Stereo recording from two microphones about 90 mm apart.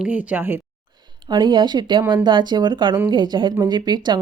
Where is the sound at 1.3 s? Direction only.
60° right (ahead or behind).